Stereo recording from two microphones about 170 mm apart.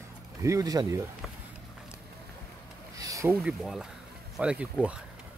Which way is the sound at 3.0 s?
20° right (ahead or behind).